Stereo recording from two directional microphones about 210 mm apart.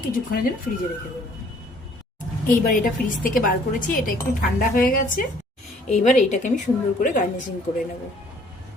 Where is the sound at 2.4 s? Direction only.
40° left (ahead or behind).